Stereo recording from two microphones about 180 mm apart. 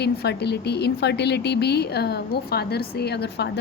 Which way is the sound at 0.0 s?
65° left (ahead or behind).